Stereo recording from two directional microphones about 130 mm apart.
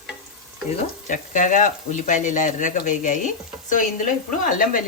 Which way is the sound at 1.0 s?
75° left (ahead or behind).